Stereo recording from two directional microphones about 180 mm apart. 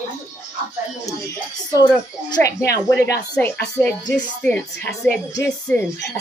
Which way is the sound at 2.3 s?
15° left (ahead or behind).